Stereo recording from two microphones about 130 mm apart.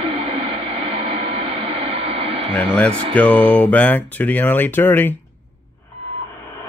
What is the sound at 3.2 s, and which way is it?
Speech, 10° left (ahead or behind).